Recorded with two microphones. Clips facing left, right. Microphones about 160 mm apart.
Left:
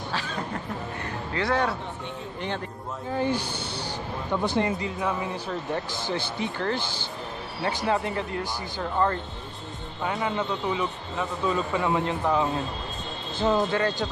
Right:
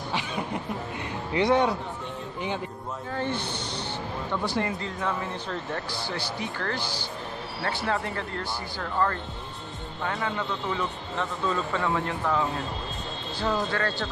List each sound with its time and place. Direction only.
0.1 s vehicle: 15° right (ahead or behind)
1.3 s speech: 20° right (ahead or behind)
3.1 s a man's voice: 10° left (ahead or behind)
4.3 s a man's voice: 20° left (ahead or behind)
10.2 s a man's voice: 15° left (ahead or behind)